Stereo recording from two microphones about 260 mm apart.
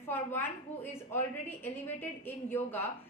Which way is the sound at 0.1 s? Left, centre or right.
Centre.